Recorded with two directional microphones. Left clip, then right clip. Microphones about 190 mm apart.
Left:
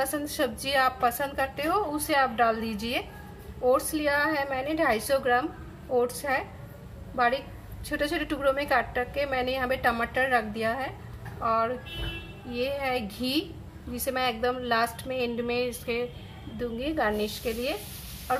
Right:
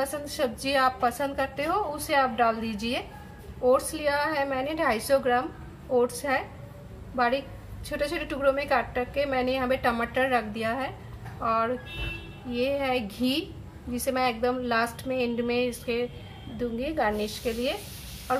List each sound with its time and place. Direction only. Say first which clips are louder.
0.0 s a woman's voice: even; 5° left (ahead or behind)
18.3 s frog: right 1 dB; centre (ahead or behind)